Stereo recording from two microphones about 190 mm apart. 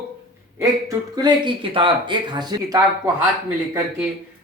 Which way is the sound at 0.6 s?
20° right (ahead or behind).